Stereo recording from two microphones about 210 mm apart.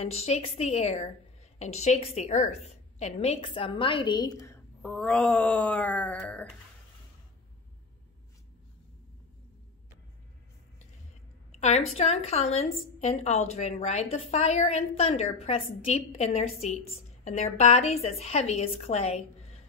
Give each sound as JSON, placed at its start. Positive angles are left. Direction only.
{"t": 0.0, "sound": "a woman's voice", "side_deg": 30}
{"t": 11.5, "sound": "a woman's voice", "side_deg": 30}